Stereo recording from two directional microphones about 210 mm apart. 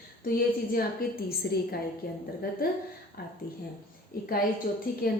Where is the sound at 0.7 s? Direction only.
45° left (ahead or behind).